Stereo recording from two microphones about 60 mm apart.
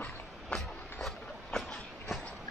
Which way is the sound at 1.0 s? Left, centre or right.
Centre.